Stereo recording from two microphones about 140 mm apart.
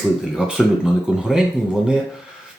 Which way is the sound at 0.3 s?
5° right (ahead or behind).